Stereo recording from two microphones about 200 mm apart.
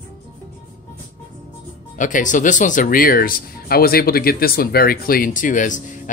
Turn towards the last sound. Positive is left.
turn(degrees=40)  # may be behind; listen again after turning